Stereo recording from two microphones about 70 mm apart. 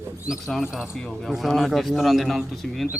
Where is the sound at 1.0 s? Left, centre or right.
Centre.